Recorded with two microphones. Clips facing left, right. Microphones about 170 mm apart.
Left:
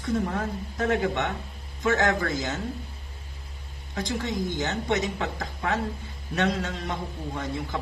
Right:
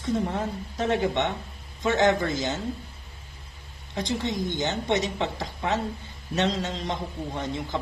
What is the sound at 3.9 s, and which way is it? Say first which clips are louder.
A woman's voice: right 1 dB; 20° right (ahead or behind).